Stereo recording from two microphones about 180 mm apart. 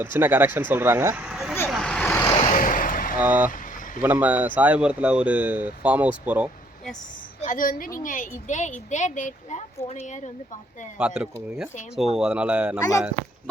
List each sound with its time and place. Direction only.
0.0 s speech: 10° right (ahead or behind)
1.7 s vehicle: 5° left (ahead or behind)
2.5 s vehicle: 50° left (ahead or behind)
3.2 s speech: 10° right (ahead or behind)
3.5 s vehicle: 50° left (ahead or behind)
4.0 s speech: 10° right (ahead or behind)
7.4 s speech: 50° left (ahead or behind)
10.9 s speech: 5° right (ahead or behind)